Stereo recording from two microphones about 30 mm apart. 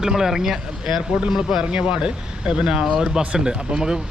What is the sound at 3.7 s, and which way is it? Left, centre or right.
Speech, right.